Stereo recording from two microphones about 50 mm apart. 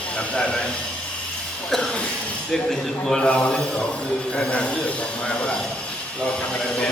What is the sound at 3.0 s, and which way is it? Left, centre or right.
A man's voice, centre.